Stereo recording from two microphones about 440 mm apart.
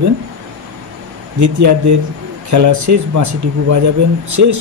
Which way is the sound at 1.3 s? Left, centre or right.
Right.